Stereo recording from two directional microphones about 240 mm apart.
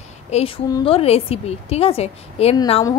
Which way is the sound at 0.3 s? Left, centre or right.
Left.